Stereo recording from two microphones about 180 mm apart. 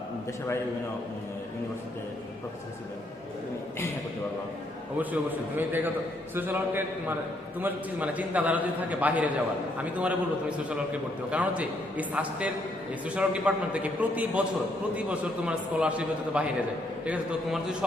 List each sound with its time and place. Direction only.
4.9 s a man's voice: 10° right (ahead or behind)
11.3 s a man's voice: 10° right (ahead or behind)